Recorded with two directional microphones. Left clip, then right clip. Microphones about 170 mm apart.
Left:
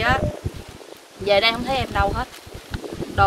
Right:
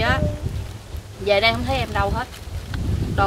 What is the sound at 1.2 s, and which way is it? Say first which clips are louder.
Speech: even; 50° left (ahead or behind).